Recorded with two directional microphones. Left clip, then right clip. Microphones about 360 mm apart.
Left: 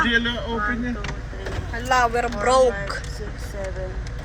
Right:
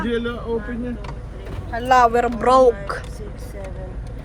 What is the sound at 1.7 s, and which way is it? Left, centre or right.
Speech, right.